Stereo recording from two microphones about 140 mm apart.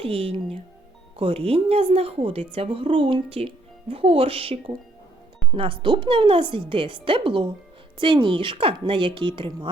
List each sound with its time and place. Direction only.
0.0 s a woman's voice: 40° right (ahead or behind)